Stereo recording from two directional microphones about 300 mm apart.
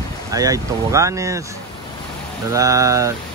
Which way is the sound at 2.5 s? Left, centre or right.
Centre.